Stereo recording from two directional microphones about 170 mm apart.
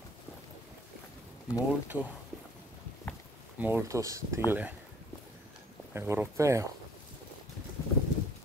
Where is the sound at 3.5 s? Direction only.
10° right (ahead or behind).